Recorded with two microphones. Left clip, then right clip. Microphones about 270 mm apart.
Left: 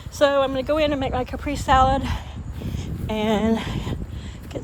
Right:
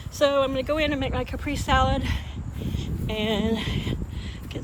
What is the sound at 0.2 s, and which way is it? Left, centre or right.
Speech, centre.